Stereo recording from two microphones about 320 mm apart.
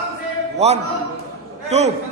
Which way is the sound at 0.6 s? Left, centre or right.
Centre.